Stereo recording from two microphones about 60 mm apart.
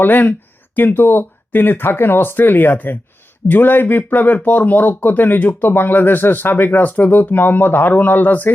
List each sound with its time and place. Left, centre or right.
0.0 s speech: left